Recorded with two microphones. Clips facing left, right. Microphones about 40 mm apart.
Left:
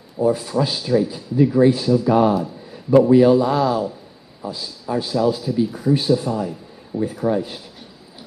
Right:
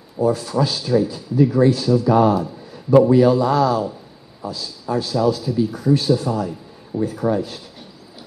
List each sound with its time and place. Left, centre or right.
0.2 s a man's voice: centre